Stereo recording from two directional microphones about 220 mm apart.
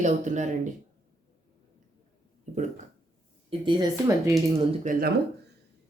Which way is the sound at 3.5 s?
20° right (ahead or behind).